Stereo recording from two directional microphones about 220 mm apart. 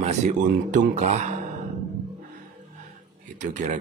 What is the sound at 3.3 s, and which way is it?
Speech, 35° right (ahead or behind).